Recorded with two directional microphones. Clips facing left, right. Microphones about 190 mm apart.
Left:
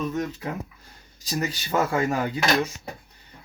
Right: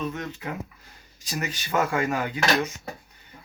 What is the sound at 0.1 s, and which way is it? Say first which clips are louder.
Speech: left 4 dB; 40° left (ahead or behind).